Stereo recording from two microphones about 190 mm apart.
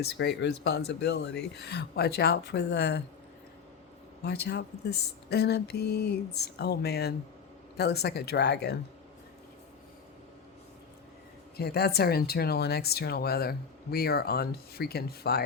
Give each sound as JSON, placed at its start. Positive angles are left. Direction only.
{"t": 0.0, "sound": "speech", "side_deg": 65}
{"t": 4.2, "sound": "speech", "side_deg": 60}
{"t": 11.5, "sound": "speech", "side_deg": 55}